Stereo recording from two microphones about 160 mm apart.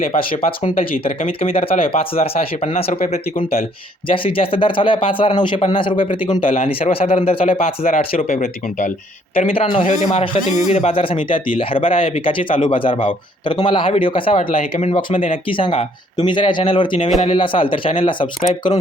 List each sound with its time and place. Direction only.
0.4 s speech: 40° left (ahead or behind)
1.4 s speech: 35° left (ahead or behind)
4.1 s speech: 35° left (ahead or behind)
9.5 s speech: 35° left (ahead or behind)